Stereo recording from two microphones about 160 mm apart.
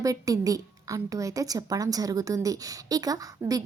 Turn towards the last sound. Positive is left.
turn(degrees=-20)  # may be behind; listen again after turning